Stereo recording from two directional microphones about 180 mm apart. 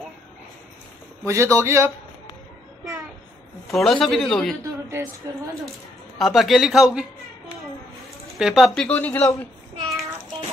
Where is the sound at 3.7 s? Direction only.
Centre (ahead or behind).